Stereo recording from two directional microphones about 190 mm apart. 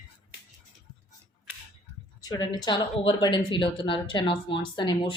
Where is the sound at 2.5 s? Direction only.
25° left (ahead or behind).